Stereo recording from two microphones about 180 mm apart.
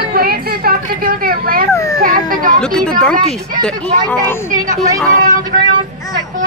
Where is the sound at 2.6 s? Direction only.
5° left (ahead or behind).